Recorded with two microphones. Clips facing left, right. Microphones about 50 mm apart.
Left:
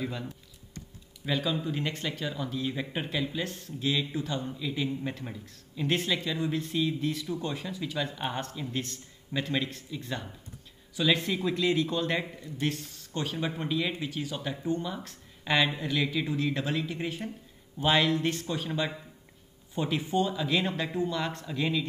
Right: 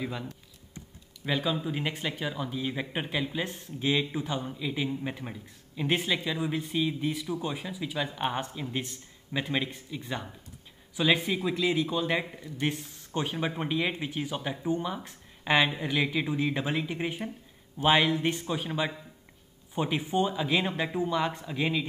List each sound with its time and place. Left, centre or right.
0.0 s speech: centre